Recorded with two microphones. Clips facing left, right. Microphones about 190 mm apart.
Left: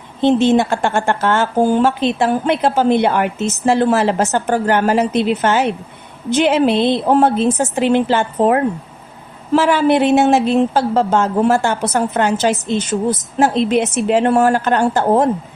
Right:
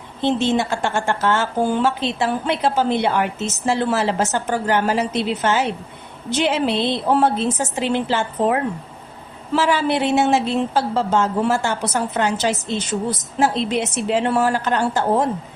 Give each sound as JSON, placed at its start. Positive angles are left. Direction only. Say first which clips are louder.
{"t": 0.2, "sound": "a woman's voice", "louder": "left 6 dB", "side_deg": 50}